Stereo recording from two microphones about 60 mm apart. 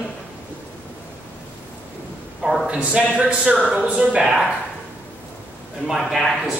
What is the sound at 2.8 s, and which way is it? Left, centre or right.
A man's voice, centre.